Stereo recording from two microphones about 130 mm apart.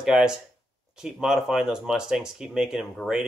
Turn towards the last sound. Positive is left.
turn(degrees=-5)  # may be behind; listen again after turning